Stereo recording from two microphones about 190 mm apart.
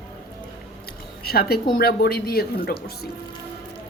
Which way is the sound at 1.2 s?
55° left (ahead or behind).